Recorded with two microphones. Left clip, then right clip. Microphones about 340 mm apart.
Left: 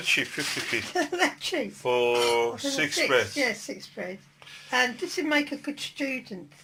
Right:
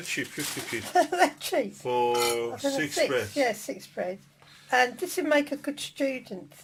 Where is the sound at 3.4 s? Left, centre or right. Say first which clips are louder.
Right 1 dB; right.